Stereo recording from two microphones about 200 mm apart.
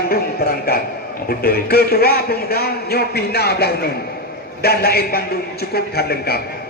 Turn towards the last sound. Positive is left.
turn(degrees=50)  # may be behind; listen again after turning